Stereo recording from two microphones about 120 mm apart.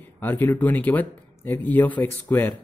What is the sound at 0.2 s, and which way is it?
Speech, 15° left (ahead or behind).